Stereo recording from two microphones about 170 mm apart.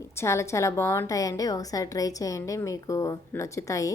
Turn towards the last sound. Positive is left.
turn(degrees=20)  # may be behind; listen again after turning